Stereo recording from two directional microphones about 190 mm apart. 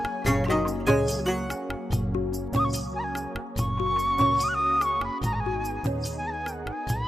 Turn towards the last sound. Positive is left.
turn(degrees=0)  # may be behind; listen again after turning